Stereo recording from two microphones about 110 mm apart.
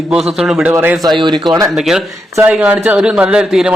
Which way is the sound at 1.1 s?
45° right (ahead or behind).